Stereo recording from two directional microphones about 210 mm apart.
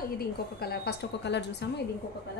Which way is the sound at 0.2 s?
50° left (ahead or behind).